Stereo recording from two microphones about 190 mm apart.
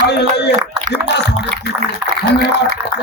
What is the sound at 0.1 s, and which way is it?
Speech, 60° left (ahead or behind).